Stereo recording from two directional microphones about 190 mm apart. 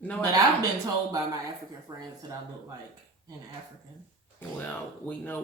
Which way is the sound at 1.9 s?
20° right (ahead or behind).